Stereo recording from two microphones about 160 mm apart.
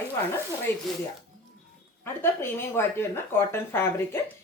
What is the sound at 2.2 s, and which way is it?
Speech, 15° left (ahead or behind).